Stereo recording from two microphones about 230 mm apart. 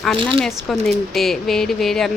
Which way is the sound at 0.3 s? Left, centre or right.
Centre.